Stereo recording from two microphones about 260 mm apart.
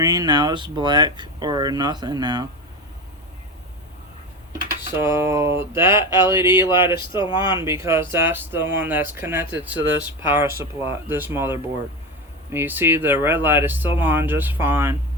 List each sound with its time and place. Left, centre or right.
0.0 s speech: centre
4.9 s speech: centre
6.1 s speech: centre
7.6 s speech: centre